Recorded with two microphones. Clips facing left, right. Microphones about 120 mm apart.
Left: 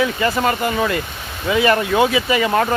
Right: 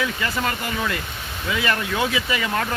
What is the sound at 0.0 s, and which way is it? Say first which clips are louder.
Speech: left 7 dB; 40° left (ahead or behind).